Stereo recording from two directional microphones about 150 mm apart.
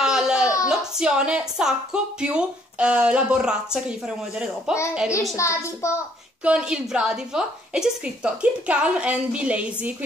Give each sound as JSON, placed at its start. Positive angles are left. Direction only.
{"t": 0.0, "sound": "a sound", "side_deg": -5}
{"t": 0.7, "sound": "a woman's voice", "side_deg": -5}
{"t": 5.3, "sound": "a child's voice", "side_deg": 20}
{"t": 6.4, "sound": "a woman's voice", "side_deg": -5}